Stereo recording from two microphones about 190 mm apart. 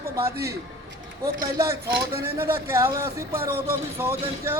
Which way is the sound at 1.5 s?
15° right (ahead or behind).